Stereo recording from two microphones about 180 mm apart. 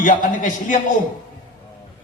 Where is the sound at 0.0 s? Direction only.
45° left (ahead or behind).